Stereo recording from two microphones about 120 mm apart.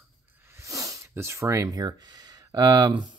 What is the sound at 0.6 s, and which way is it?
Speech, 25° right (ahead or behind).